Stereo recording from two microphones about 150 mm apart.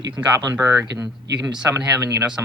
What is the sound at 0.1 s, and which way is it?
Speech, 25° right (ahead or behind).